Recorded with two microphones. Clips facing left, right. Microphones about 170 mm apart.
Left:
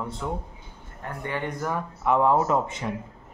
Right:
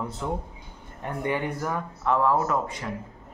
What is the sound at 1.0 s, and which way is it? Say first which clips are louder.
Speech: right 3 dB; 20° right (ahead or behind).